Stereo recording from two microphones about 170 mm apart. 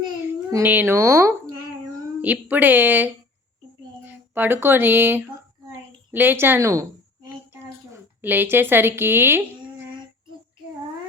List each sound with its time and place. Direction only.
0.5 s speech: 10° right (ahead or behind)
4.4 s speech: 10° right (ahead or behind)
6.1 s a sound: 10° right (ahead or behind)